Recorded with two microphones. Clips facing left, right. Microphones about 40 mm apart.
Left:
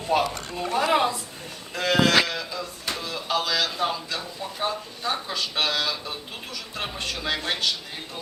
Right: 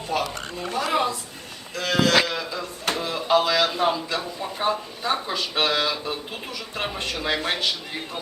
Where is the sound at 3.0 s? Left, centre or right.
Right.